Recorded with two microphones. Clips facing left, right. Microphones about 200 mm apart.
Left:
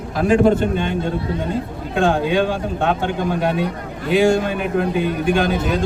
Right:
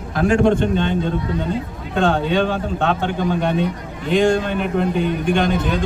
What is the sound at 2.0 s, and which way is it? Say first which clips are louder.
A man's voice: left 1 dB; 10° left (ahead or behind).